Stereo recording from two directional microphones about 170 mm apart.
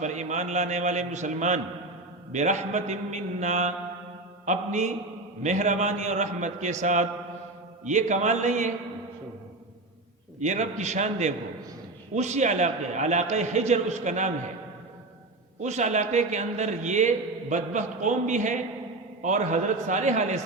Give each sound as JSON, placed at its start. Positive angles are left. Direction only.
{"t": 0.0, "sound": "a man's voice", "side_deg": -45}
{"t": 10.4, "sound": "a man's voice", "side_deg": -45}
{"t": 15.6, "sound": "a man's voice", "side_deg": -45}